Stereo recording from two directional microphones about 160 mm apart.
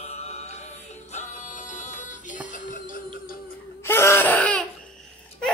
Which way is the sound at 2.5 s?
55° left (ahead or behind).